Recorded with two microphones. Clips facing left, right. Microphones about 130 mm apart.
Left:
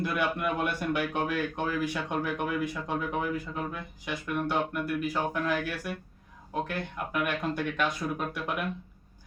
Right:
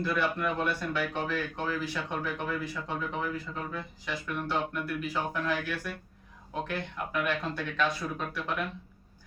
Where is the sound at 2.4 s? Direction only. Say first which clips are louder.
Left 3 dB; 15° left (ahead or behind).